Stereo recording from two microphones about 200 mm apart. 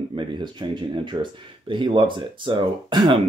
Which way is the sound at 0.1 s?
25° right (ahead or behind).